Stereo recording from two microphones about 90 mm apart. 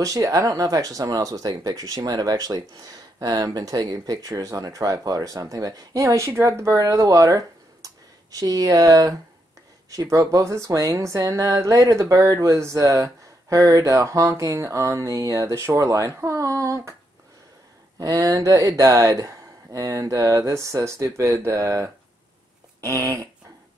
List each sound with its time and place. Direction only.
0.0 s speech: 40° right (ahead or behind)
17.9 s speech: 40° right (ahead or behind)
22.8 s a sound: 35° right (ahead or behind)